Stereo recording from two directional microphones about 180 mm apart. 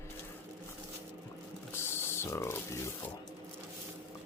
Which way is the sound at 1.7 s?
15° left (ahead or behind).